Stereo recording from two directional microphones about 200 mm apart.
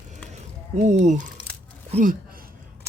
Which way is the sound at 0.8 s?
35° right (ahead or behind).